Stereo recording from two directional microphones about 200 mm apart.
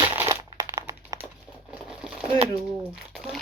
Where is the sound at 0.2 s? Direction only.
15° right (ahead or behind).